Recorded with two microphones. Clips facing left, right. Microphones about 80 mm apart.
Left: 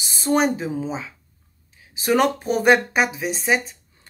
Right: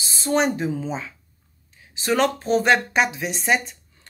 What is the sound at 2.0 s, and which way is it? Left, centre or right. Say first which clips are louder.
Speech: left 2 dB; centre.